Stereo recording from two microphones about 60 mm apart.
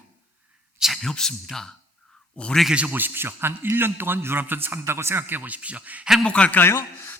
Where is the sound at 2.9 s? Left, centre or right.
Right.